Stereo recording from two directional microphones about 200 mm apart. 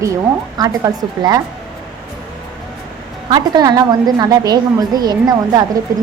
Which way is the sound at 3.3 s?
20° right (ahead or behind).